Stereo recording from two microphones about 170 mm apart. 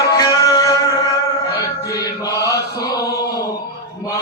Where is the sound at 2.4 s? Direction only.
20° left (ahead or behind).